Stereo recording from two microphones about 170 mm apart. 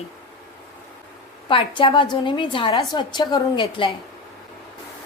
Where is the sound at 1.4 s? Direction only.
30° left (ahead or behind).